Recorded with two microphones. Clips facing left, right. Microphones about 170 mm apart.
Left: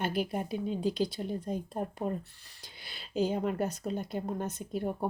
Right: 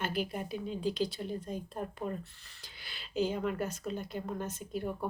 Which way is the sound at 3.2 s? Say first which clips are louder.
Left 2 dB; 35° left (ahead or behind).